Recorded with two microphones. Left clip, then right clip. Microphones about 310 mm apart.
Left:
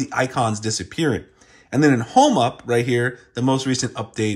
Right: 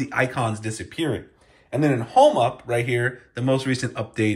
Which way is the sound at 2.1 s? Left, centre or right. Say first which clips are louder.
Right 3 dB; left.